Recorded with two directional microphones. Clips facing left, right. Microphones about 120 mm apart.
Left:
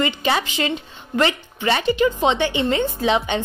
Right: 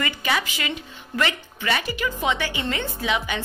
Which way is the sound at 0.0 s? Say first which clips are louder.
Left 5 dB; 25° left (ahead or behind).